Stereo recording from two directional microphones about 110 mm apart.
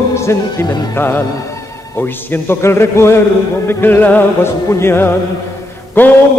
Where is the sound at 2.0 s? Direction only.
20° left (ahead or behind).